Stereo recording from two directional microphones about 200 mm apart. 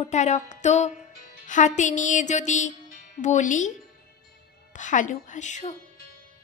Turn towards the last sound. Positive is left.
turn(degrees=35)  # may be behind; listen again after turning